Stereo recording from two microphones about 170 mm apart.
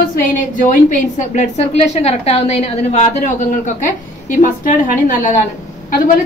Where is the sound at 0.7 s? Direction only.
45° left (ahead or behind).